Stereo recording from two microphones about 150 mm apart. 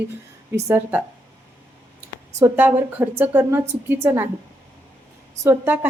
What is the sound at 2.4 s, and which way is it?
A woman's voice, 15° right (ahead or behind).